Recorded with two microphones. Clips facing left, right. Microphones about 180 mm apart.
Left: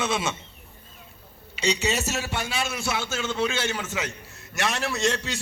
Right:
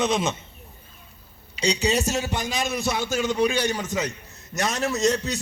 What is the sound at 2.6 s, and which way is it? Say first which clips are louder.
A man's voice: right 4 dB; 15° right (ahead or behind).